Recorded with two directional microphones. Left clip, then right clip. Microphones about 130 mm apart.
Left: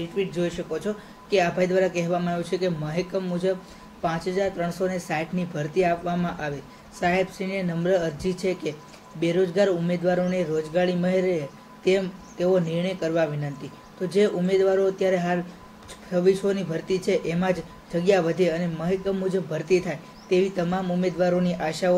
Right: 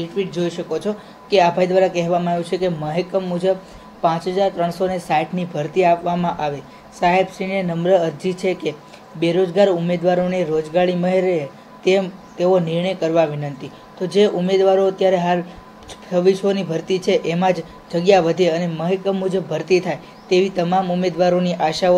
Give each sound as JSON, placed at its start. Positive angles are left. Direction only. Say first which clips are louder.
{"t": 0.1, "sound": "a man's voice", "louder": "right 3 dB", "side_deg": -30}